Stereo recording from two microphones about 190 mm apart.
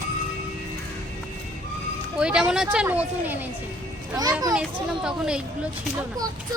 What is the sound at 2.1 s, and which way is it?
A child's voice, 5° right (ahead or behind).